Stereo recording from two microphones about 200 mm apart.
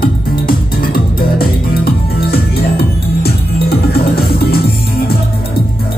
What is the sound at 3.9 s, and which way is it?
Music, 50° left (ahead or behind).